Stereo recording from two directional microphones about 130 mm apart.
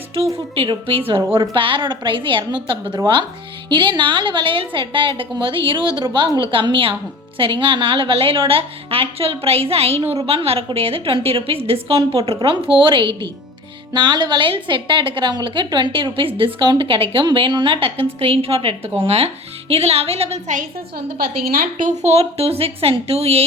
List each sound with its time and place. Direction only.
0.5 s a woman's voice: 45° right (ahead or behind)
21.6 s a woman's voice: 80° right; by 23.4 s 50° right (ahead or behind)